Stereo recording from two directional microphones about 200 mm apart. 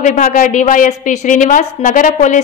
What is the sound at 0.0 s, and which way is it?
A woman's voice, 40° left (ahead or behind).